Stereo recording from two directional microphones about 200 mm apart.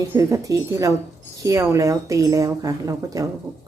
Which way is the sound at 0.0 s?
15° right (ahead or behind).